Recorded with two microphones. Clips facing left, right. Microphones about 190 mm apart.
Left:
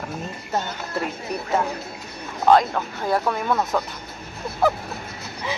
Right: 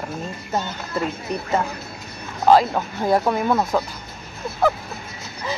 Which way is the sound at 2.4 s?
10° right (ahead or behind).